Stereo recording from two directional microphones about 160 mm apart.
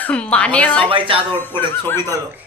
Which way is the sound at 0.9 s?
35° right (ahead or behind).